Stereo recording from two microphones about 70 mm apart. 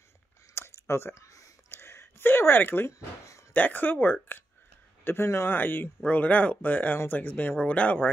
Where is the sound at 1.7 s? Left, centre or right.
Left.